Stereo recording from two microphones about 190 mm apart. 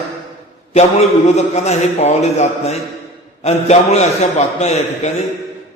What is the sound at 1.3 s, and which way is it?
A man's voice, 35° left (ahead or behind).